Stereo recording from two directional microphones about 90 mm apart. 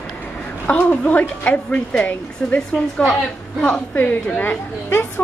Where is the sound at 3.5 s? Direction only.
15° left (ahead or behind).